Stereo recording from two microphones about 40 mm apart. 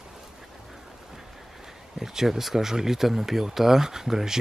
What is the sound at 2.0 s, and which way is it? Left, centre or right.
Speech, centre.